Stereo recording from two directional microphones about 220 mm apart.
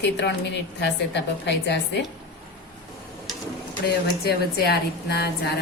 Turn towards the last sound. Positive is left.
turn(degrees=45)  # may be behind; listen again after turning